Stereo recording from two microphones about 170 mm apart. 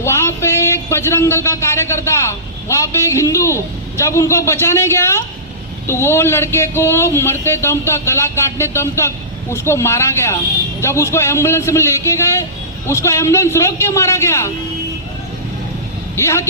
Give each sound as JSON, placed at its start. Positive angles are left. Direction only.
{"t": 0.0, "sound": "a man's voice", "side_deg": 15}
{"t": 16.1, "sound": "speech", "side_deg": 15}